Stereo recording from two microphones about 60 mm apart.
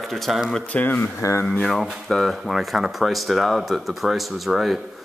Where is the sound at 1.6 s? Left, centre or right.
Centre.